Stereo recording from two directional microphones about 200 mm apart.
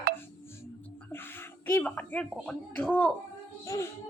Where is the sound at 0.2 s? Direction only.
10° left (ahead or behind).